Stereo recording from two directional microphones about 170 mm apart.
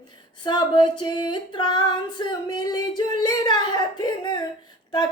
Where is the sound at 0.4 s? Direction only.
25° left (ahead or behind).